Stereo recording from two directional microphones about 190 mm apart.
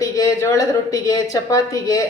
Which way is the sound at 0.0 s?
15° left (ahead or behind).